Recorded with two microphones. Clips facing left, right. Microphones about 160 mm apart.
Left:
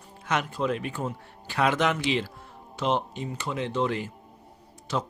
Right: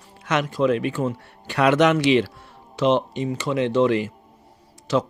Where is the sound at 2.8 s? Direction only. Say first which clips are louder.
Right 7 dB; 90° right.